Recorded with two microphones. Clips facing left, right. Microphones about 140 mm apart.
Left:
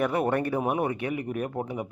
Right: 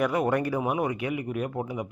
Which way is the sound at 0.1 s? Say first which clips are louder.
Even; 30° left (ahead or behind).